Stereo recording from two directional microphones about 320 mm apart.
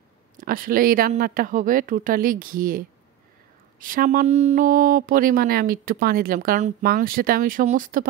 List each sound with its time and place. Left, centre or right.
0.4 s a woman's voice: right